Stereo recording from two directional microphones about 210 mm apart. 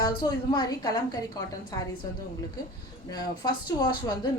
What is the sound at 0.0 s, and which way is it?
A woman's voice, 20° left (ahead or behind).